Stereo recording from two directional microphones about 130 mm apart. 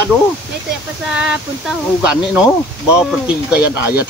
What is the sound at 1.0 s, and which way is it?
Speech, 5° right (ahead or behind).